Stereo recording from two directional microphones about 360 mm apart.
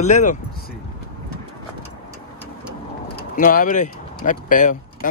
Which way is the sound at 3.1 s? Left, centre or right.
Left.